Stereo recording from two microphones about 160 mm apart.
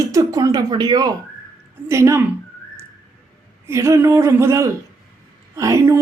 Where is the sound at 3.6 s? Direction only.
20° right (ahead or behind).